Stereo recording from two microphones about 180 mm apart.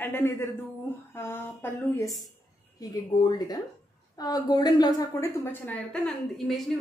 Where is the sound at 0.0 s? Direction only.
10° left (ahead or behind).